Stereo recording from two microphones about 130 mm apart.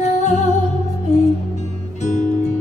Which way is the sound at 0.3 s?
55° left (ahead or behind).